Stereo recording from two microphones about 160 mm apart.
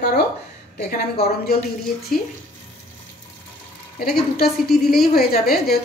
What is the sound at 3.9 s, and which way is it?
A woman's voice, 75° left (ahead or behind).